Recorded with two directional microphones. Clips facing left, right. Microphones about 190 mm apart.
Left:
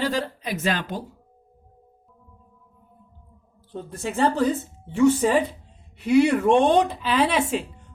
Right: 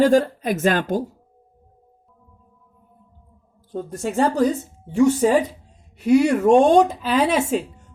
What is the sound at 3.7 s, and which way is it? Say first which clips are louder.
Speech: right 4 dB; 45° right (ahead or behind).